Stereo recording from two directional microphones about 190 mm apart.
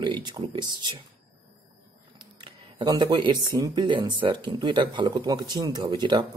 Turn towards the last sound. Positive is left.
turn(degrees=-25)  # may be behind; listen again after turning